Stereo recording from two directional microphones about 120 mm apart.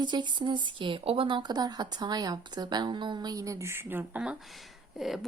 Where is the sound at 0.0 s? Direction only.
40° right (ahead or behind).